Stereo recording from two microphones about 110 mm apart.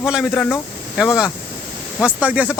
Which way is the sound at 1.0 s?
5° right (ahead or behind).